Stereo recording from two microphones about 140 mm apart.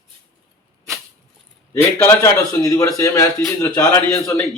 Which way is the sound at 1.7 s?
20° left (ahead or behind).